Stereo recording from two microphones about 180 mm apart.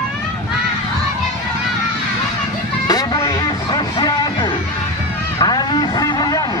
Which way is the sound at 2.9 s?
20° left (ahead or behind).